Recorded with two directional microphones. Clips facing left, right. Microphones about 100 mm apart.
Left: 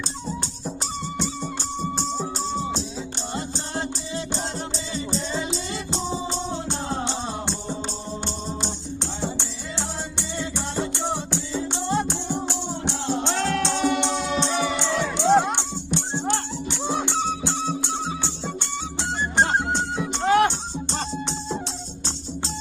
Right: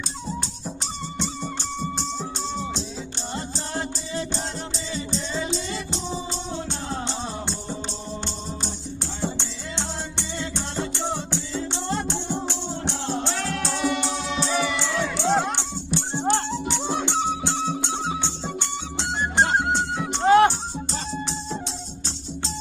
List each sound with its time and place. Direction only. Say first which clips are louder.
3.3 s music: even; 30° left (ahead or behind)
8.5 s music: left 2 dB; 25° left (ahead or behind)
13.4 s music: left 3 dB; 30° left (ahead or behind); by 16.2 s 15° left (ahead or behind)
16.2 s music: right 3 dB; 20° right (ahead or behind)
16.8 s music: left 4 dB; 15° left (ahead or behind)
18.4 s music: even; 20° right (ahead or behind)
19.6 s music: right 1 dB; centre (ahead or behind)
20.2 s music: right 3 dB; 35° right (ahead or behind)